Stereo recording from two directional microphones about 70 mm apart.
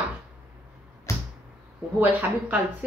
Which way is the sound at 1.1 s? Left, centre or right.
Left.